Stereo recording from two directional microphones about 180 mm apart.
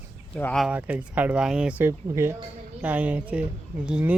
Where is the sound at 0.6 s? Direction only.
10° right (ahead or behind).